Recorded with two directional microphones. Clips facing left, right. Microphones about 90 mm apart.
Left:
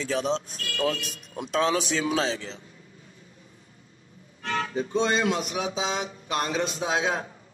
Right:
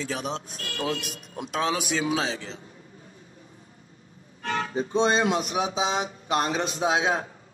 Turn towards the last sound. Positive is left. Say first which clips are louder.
# right 2 dB
turn(degrees=-25)  # may be behind; listen again after turning